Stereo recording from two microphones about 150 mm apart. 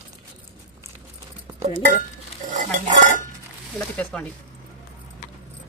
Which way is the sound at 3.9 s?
10° left (ahead or behind).